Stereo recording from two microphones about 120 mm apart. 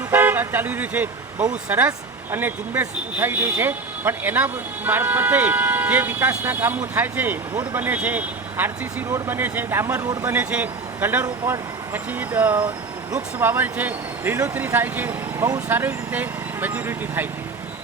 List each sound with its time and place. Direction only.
0.1 s speech: 15° right (ahead or behind)
10.3 s speech: 10° right (ahead or behind)